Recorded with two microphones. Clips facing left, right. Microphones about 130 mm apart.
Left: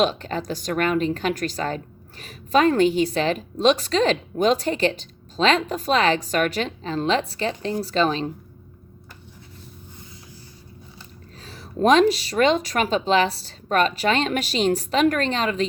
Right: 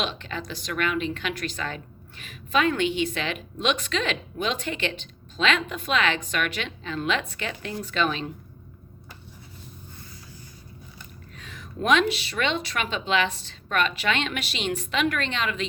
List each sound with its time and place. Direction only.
0.0 s a woman's voice: 40° left (ahead or behind)
11.3 s a woman's voice: 35° left (ahead or behind)